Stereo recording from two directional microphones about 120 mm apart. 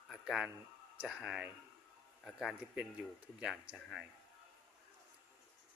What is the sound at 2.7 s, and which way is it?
Speech, 10° right (ahead or behind).